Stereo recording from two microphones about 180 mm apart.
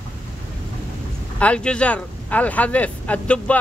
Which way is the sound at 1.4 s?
5° left (ahead or behind).